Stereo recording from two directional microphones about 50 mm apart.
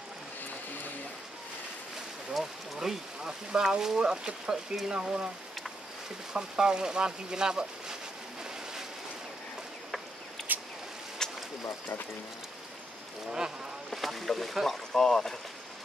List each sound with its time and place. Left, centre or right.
2.3 s speech: centre
6.3 s speech: centre
10.5 s vehicle: right
11.2 s a sound: centre
13.8 s speech: centre